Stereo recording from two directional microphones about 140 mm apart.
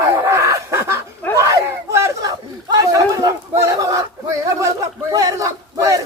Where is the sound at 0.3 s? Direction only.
20° right (ahead or behind).